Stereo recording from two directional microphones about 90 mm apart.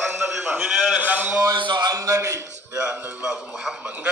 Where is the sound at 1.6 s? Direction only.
55° right (ahead or behind).